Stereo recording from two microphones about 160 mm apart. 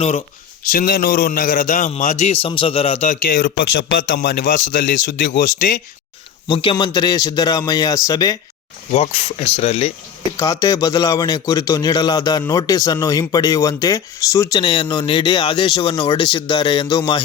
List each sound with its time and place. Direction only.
0.0 s speech: 50° left (ahead or behind)
0.7 s a man's voice: 70° left (ahead or behind)
2.0 s a man's voice: 50° left (ahead or behind)
3.1 s a man's voice: 60° left (ahead or behind)
4.2 s speech: 90° left
4.5 s a man's voice: 55° left (ahead or behind)
4.9 s speech: 90° left
6.5 s a man's voice: 30° left (ahead or behind)
8.9 s a man's voice: 40° left (ahead or behind)
10.3 s a man's voice: 20° left (ahead or behind)